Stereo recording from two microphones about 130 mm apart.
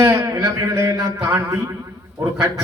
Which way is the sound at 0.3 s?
20° right (ahead or behind).